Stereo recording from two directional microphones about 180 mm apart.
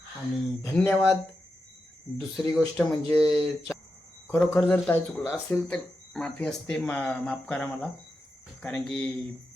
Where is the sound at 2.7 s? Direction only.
Centre (ahead or behind).